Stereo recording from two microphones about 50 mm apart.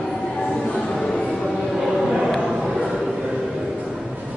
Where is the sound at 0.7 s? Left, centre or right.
Left.